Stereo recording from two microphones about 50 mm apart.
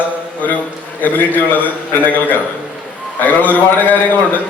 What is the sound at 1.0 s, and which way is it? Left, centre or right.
A man's voice, left.